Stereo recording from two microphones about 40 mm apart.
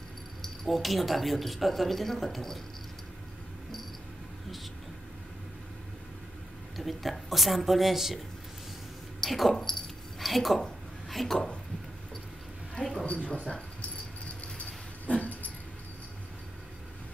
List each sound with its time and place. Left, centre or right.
0.4 s speech: centre
6.8 s speech: centre
9.2 s speech: centre
9.7 s keys jangling: centre
11.1 s a sound: centre
12.7 s a sound: centre
13.0 s speech: left
15.0 s dog: left